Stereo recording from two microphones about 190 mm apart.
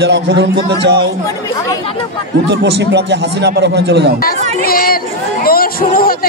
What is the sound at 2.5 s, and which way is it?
Speech, 65° right (ahead or behind).